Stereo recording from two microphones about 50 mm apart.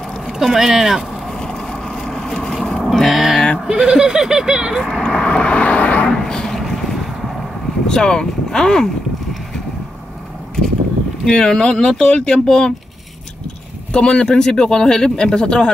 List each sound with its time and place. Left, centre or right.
0.3 s speech: centre
1.3 s vehicle: centre
2.9 s vehicle: centre
3.6 s goat: centre
4.7 s vehicle: centre; by 6.0 s left
6.2 s vehicle: centre
7.8 s speech: centre
11.2 s speech: centre
13.9 s speech: centre